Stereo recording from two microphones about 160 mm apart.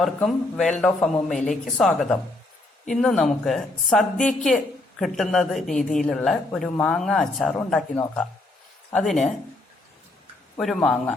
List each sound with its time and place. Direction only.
0.0 s a woman's voice: 5° left (ahead or behind)
10.6 s a woman's voice: centre (ahead or behind)